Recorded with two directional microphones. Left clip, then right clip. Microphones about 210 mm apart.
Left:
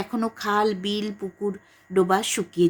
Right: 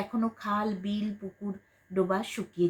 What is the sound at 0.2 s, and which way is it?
Speech, 50° left (ahead or behind).